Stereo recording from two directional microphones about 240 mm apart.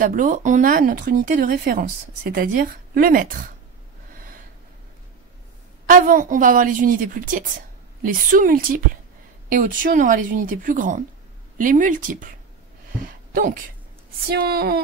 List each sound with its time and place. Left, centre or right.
0.0 s speech: right
5.9 s speech: right
13.3 s speech: right